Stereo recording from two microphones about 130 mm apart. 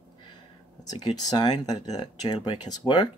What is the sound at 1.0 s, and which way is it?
Speech, 30° left (ahead or behind).